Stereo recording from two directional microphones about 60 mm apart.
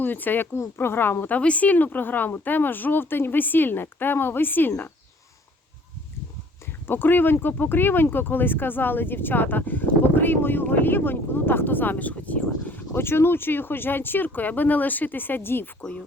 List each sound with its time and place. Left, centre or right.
0.0 s speech: left
1.4 s speech: left
6.7 s speech: left
12.9 s speech: left